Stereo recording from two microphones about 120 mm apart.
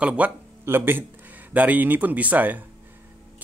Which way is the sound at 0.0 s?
10° right (ahead or behind).